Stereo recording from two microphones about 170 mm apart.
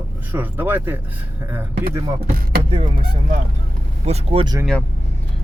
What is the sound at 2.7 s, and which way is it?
Speech, 35° right (ahead or behind).